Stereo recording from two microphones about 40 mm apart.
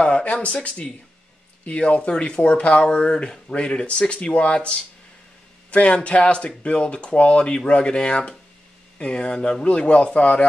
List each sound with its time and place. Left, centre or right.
0.0 s speech: left